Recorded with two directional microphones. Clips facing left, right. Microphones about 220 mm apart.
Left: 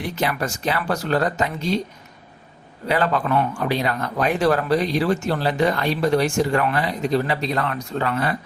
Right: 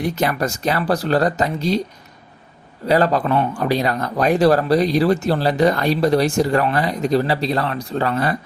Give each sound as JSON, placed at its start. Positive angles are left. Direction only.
{"t": 0.2, "sound": "speech", "side_deg": -40}
{"t": 2.8, "sound": "speech", "side_deg": -40}